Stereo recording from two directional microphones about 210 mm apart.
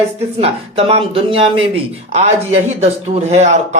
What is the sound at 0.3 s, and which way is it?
Speech, 30° right (ahead or behind).